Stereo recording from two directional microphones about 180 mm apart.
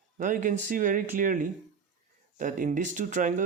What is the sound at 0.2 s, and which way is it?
Speech, 45° right (ahead or behind).